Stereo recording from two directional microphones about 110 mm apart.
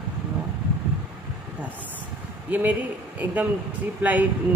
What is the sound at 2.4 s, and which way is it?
A man's voice, 15° right (ahead or behind).